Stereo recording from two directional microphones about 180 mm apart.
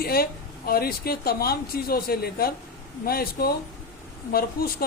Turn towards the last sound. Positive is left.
turn(degrees=60)  # may be behind; listen again after turning